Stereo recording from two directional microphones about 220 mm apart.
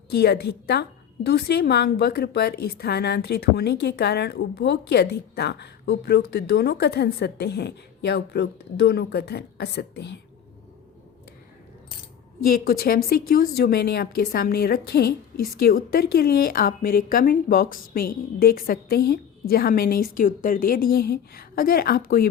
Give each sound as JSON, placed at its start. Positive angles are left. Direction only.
{"t": 0.1, "sound": "a woman's voice", "side_deg": 45}
{"t": 12.5, "sound": "a woman's voice", "side_deg": 40}